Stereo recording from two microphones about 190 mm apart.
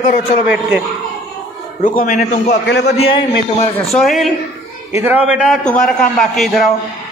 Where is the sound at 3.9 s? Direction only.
Centre (ahead or behind).